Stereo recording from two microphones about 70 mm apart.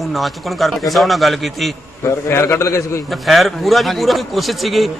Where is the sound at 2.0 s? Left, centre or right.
Left.